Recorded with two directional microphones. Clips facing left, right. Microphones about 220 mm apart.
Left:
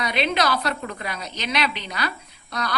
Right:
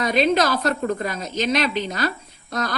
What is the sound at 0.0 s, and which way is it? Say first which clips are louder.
A woman's voice: right 5 dB; 45° right (ahead or behind).